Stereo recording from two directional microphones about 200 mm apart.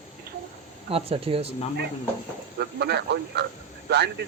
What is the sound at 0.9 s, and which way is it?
Speech, 30° right (ahead or behind).